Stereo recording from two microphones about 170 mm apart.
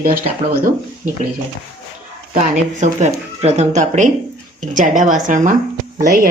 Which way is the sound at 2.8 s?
40° right (ahead or behind).